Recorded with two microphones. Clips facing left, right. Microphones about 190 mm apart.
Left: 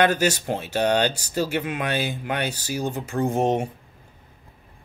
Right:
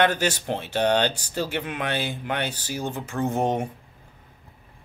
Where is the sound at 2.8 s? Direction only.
40° left (ahead or behind).